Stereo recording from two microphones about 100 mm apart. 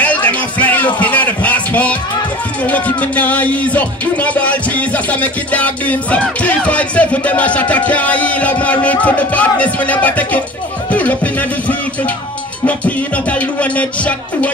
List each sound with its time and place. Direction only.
0.0 s music: 15° left (ahead or behind)
2.6 s speech: 15° left (ahead or behind)
6.4 s music: 15° left (ahead or behind)